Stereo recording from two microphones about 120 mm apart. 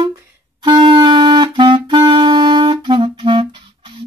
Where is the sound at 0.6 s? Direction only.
40° right (ahead or behind).